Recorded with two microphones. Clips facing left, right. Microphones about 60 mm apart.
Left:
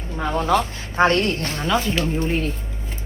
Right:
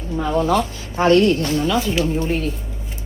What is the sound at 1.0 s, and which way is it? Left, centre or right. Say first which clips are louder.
A woman's voice: right 5 dB; left.